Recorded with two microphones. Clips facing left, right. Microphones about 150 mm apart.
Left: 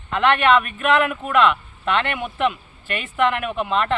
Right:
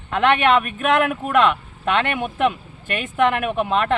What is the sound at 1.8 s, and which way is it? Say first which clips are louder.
Speech: right 2 dB; 50° right (ahead or behind).